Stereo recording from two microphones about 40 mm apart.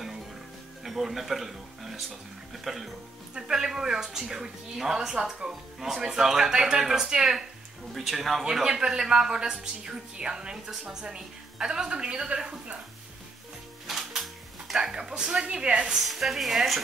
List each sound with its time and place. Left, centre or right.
0.8 s a woman's voice: centre
7.9 s speech: centre
8.5 s a woman's voice: centre
13.8 s music: centre; by 15.9 s right
16.0 s speech: centre